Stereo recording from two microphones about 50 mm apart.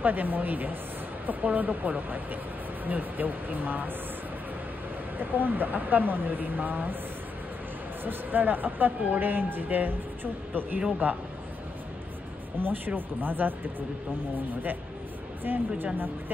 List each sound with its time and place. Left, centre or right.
0.0 s speech: right
5.2 s speech: right
8.0 s speech: right
12.5 s speech: right
15.4 s speech: right